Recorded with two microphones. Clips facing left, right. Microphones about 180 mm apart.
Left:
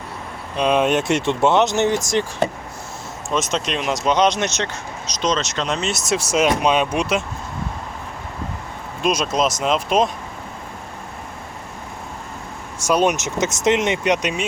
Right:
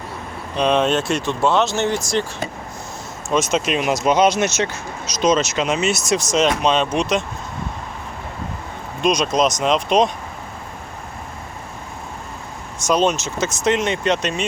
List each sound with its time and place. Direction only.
0.5 s speech: 5° left (ahead or behind)
3.2 s speech: centre (ahead or behind)
9.0 s speech: 5° left (ahead or behind)
12.8 s speech: 10° left (ahead or behind)